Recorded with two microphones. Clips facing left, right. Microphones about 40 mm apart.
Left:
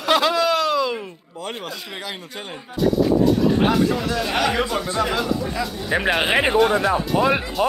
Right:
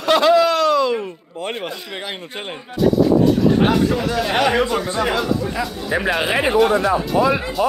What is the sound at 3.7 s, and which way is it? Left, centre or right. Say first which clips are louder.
Speech: right 2 dB; centre.